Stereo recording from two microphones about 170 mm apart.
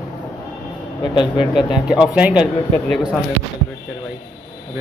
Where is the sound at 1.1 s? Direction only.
30° left (ahead or behind).